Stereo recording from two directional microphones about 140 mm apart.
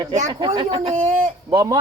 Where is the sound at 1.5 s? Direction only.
25° right (ahead or behind).